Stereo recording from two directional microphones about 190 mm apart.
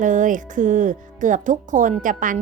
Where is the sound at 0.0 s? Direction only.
40° right (ahead or behind).